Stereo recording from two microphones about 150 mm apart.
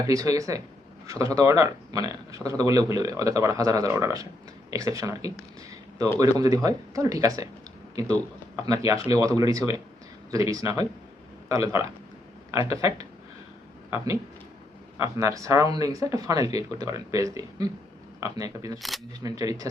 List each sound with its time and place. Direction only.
0.0 s speech: 25° right (ahead or behind)
15.2 s speech: 20° right (ahead or behind)